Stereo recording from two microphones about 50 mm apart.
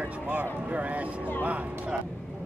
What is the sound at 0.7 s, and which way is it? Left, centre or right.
Speech, right.